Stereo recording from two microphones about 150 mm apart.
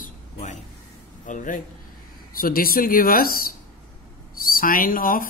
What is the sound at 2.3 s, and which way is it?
Speech, 75° left (ahead or behind).